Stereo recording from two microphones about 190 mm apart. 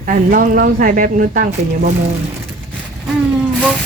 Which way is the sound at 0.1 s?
50° right (ahead or behind).